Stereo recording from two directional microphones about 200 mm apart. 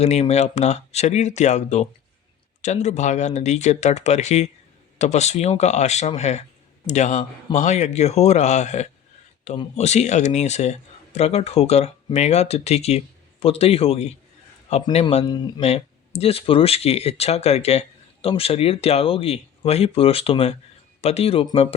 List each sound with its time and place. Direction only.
0.0 s speech: 35° left (ahead or behind)
15.6 s speech: 30° left (ahead or behind)